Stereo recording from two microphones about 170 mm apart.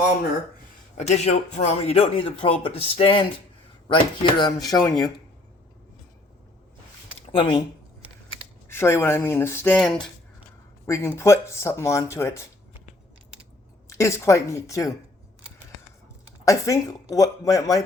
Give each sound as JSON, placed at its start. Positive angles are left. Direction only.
{"t": 0.9, "sound": "speech", "side_deg": 40}
{"t": 7.3, "sound": "speech", "side_deg": 30}
{"t": 8.7, "sound": "speech", "side_deg": 15}
{"t": 13.8, "sound": "speech", "side_deg": 20}
{"t": 16.5, "sound": "speech", "side_deg": 20}